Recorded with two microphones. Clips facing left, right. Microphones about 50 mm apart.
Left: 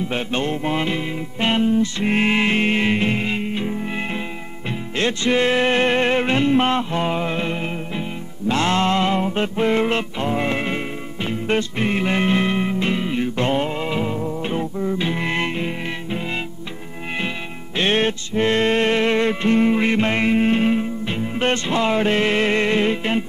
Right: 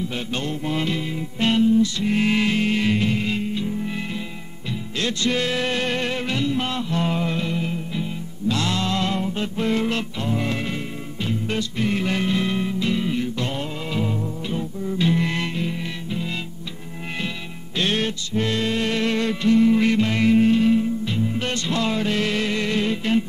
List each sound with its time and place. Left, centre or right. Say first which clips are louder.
0.1 s music: left 5 dB; left
14.4 s music: left 4 dB; left
17.7 s music: left 4 dB; left